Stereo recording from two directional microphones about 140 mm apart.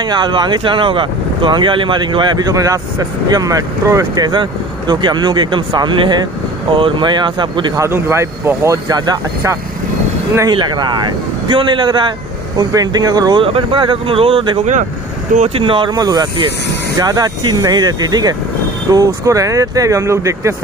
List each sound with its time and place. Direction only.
0.0 s speech: 30° right (ahead or behind)
7.8 s speech: 20° right (ahead or behind); by 14.6 s 40° right (ahead or behind)
14.6 s speech: 60° right (ahead or behind)
15.3 s speech: 45° right (ahead or behind); by 20.5 s 20° right (ahead or behind)